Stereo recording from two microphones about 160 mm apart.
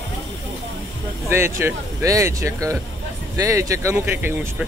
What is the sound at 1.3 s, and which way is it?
Speech, 15° right (ahead or behind).